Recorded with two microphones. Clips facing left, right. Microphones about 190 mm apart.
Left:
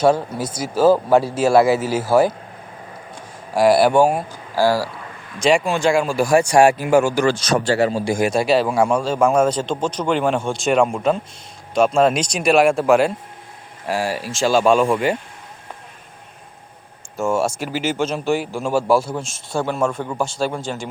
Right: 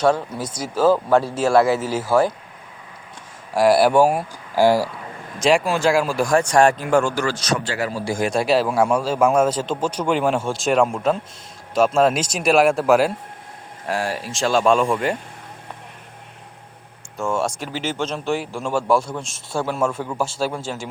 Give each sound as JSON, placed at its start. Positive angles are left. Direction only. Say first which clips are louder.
{"t": 0.0, "sound": "speech", "louder": "left 2 dB", "side_deg": 5}
{"t": 3.5, "sound": "speech", "louder": "left 1 dB", "side_deg": 0}
{"t": 4.5, "sound": "speech", "louder": "right 2 dB", "side_deg": -20}
{"t": 5.4, "sound": "speech", "louder": "left 1 dB", "side_deg": 0}
{"t": 7.3, "sound": "speech", "louder": "left 6 dB", "side_deg": 30}
{"t": 7.9, "sound": "speech", "louder": "left 4 dB", "side_deg": 20}
{"t": 8.3, "sound": "speech", "louder": "right 1 dB", "side_deg": 0}
{"t": 17.2, "sound": "speech", "louder": "left 3 dB", "side_deg": 5}